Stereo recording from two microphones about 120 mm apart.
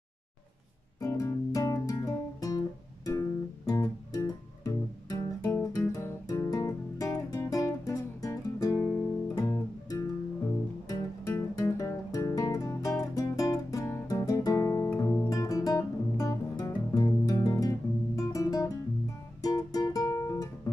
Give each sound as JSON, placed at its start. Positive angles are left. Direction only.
{"t": 1.0, "sound": "guitar", "side_deg": 30}
{"t": 3.1, "sound": "music", "side_deg": 30}
{"t": 15.0, "sound": "guitar", "side_deg": 30}
{"t": 19.4, "sound": "music", "side_deg": 30}